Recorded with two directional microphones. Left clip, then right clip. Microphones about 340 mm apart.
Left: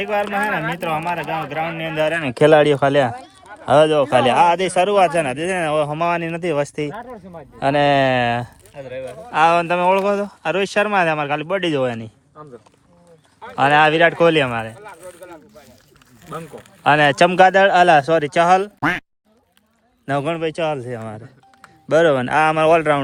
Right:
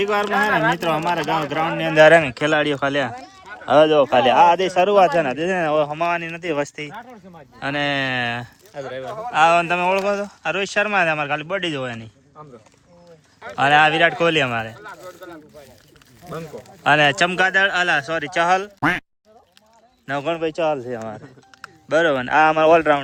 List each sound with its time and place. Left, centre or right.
0.0 s speech: centre
0.5 s speech: right
0.8 s speech: centre
2.3 s a man's voice: centre
8.7 s speech: centre
9.3 s speech: centre
13.6 s speech: centre
14.8 s a sound: left
16.8 s a man's voice: centre
18.8 s speech: centre
20.1 s speech: centre
21.8 s a man's voice: centre